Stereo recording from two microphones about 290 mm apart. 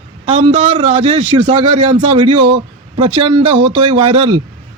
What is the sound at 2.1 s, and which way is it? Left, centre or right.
A man's voice, centre.